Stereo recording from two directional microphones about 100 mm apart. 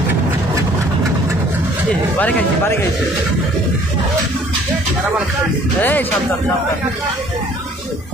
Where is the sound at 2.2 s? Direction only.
15° left (ahead or behind).